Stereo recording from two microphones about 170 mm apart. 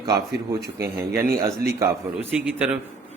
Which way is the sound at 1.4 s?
20° right (ahead or behind).